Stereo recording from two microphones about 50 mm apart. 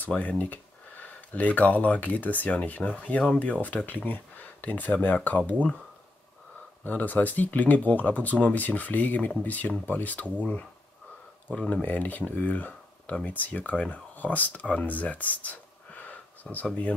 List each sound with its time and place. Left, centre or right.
0.2 s speech: left
6.8 s speech: left
11.5 s speech: left
11.8 s speech: left